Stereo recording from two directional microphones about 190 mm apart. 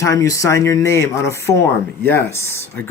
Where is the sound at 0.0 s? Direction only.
15° left (ahead or behind).